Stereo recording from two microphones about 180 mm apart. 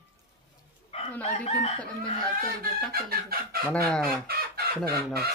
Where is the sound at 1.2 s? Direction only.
35° left (ahead or behind).